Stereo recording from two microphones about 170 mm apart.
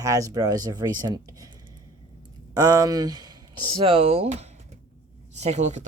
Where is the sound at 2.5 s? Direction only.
20° right (ahead or behind); by 5.8 s 45° right (ahead or behind).